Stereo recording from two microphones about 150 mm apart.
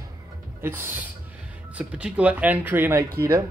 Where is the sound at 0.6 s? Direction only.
15° right (ahead or behind).